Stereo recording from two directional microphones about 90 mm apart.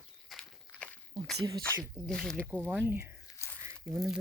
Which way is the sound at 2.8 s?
25° right (ahead or behind).